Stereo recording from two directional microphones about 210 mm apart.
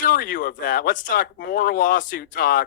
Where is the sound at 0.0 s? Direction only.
40° left (ahead or behind).